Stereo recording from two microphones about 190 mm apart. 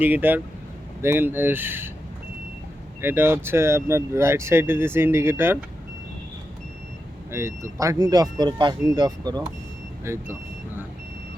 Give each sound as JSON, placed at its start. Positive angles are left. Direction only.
{"t": 0.0, "sound": "speech", "side_deg": -10}
{"t": 3.0, "sound": "speech", "side_deg": -10}
{"t": 7.3, "sound": "speech", "side_deg": -15}